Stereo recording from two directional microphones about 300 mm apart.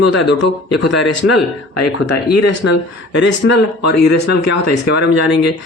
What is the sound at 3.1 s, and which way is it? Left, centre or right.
Speech, left.